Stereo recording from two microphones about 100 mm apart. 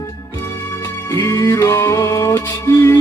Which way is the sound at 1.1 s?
30° left (ahead or behind).